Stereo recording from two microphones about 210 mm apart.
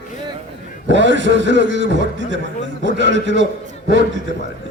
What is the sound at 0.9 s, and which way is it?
A man's voice, 60° right (ahead or behind).